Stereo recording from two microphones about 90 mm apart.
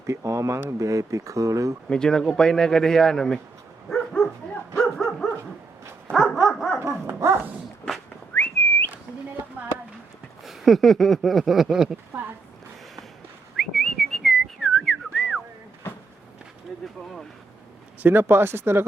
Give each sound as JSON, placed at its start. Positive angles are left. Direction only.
{"t": 0.0, "sound": "speech", "side_deg": -35}
{"t": 1.9, "sound": "speech", "side_deg": 5}
{"t": 3.8, "sound": "dog", "side_deg": 5}
{"t": 7.1, "sound": "speech", "side_deg": -25}
{"t": 8.4, "sound": "whistling", "side_deg": 20}
{"t": 10.4, "sound": "a sound", "side_deg": 0}
{"t": 13.6, "sound": "whistling", "side_deg": 0}
{"t": 18.0, "sound": "speech", "side_deg": -25}